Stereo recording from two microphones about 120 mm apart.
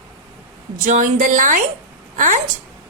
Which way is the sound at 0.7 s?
90° right.